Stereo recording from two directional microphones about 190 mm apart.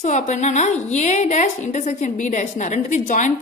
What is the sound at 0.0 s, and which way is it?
A woman's voice, 35° left (ahead or behind).